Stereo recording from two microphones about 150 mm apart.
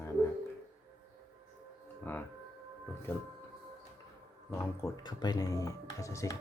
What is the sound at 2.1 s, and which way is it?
Speech, 10° left (ahead or behind).